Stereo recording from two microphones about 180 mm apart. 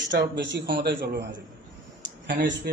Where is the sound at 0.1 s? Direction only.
75° right (ahead or behind).